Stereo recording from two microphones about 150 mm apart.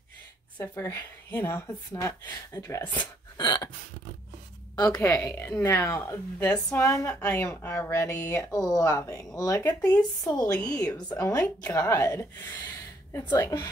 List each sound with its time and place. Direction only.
0.6 s speech: 20° left (ahead or behind)
3.3 s a sound: 25° left (ahead or behind)
4.7 s speech: 25° left (ahead or behind)
9.8 s speech: 25° left (ahead or behind)
11.2 s speech: 15° left (ahead or behind)